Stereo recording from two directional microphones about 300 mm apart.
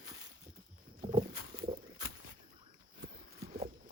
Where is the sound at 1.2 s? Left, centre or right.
Centre.